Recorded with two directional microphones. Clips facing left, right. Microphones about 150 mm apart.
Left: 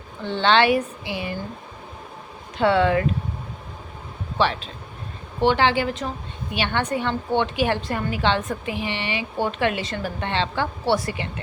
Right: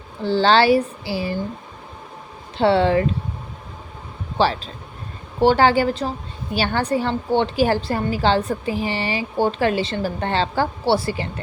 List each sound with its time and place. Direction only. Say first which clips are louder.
0.2 s a woman's voice: right 3 dB; 35° right (ahead or behind)
2.6 s a woman's voice: right 2 dB; 30° right (ahead or behind)
4.4 s a woman's voice: right 3 dB; 35° right (ahead or behind)